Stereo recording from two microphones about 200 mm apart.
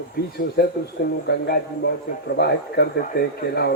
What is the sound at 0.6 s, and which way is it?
Speech, 55° left (ahead or behind).